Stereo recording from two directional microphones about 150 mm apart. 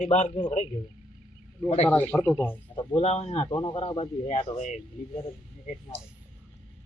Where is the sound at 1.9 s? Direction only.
10° left (ahead or behind).